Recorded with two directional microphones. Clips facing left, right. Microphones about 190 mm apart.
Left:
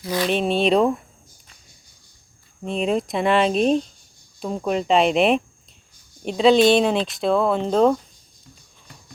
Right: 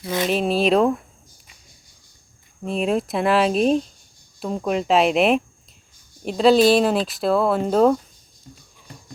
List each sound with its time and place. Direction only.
0.0 s speech: 25° right (ahead or behind)
0.3 s speech: centre (ahead or behind)
2.6 s speech: 5° right (ahead or behind)